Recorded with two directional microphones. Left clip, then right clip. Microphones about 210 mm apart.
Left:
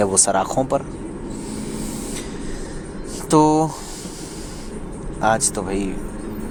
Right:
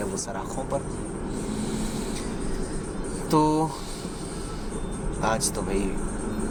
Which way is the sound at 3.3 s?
30° left (ahead or behind).